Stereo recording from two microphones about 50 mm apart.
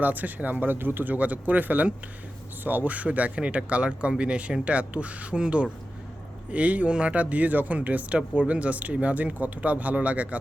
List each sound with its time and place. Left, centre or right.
0.0 s speech: right